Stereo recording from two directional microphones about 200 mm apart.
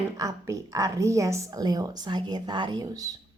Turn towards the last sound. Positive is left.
turn(degrees=-20)  # may be behind; listen again after turning